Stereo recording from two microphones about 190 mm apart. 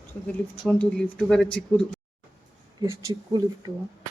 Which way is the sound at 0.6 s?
5° left (ahead or behind).